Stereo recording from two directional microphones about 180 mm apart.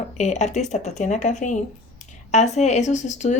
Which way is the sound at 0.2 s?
40° left (ahead or behind).